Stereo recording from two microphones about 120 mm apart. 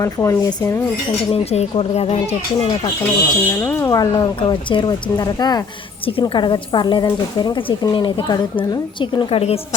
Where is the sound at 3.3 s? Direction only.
20° left (ahead or behind); by 9.4 s 40° left (ahead or behind).